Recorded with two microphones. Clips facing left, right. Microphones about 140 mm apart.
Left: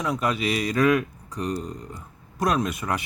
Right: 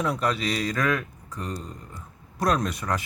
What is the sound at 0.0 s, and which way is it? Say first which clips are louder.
Speech: left 1 dB; 5° left (ahead or behind).